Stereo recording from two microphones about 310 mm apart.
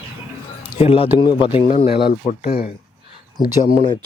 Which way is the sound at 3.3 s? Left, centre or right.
Centre.